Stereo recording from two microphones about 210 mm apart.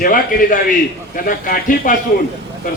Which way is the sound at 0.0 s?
40° left (ahead or behind).